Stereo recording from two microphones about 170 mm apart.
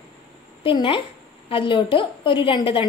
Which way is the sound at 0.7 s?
30° left (ahead or behind).